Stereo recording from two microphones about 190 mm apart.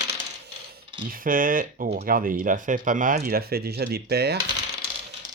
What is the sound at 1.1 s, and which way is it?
Speech, 45° right (ahead or behind).